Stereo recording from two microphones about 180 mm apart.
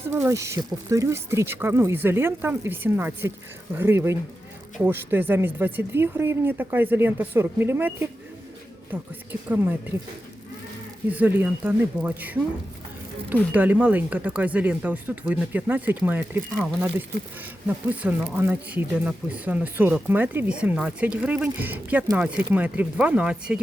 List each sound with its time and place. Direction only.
0.1 s speech: 15° right (ahead or behind)
11.1 s speech: 10° right (ahead or behind)
13.5 s speech: 10° right (ahead or behind)
17.7 s speech: 10° right (ahead or behind)